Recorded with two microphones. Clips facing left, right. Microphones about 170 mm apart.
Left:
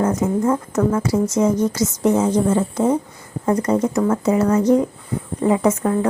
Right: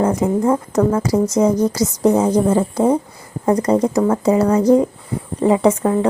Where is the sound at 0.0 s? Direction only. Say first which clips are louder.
Right 2 dB; 30° right (ahead or behind).